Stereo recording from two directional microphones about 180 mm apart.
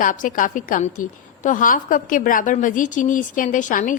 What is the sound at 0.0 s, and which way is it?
A woman's voice, 45° left (ahead or behind).